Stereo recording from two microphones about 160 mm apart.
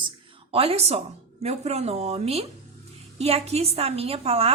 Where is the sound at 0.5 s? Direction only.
40° right (ahead or behind).